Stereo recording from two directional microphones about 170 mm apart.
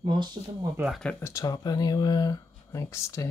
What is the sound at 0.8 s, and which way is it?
Speech, centre (ahead or behind).